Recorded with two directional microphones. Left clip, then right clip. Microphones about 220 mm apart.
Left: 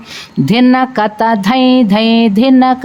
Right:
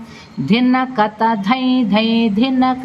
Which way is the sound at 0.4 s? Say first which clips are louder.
Left 5 dB; 45° left (ahead or behind).